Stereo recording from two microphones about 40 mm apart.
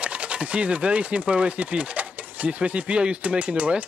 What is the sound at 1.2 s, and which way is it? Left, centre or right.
Speech, right.